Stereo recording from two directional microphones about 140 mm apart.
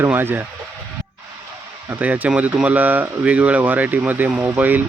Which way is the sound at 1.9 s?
10° right (ahead or behind).